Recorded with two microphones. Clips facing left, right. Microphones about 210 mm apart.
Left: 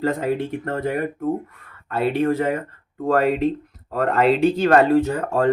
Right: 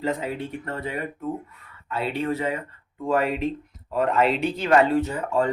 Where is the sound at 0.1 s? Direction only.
50° left (ahead or behind).